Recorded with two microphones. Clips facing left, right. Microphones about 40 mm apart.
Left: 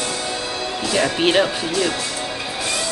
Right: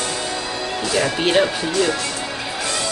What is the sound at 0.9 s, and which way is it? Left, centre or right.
Speech, centre.